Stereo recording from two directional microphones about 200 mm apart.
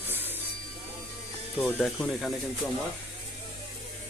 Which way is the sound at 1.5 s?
5° left (ahead or behind).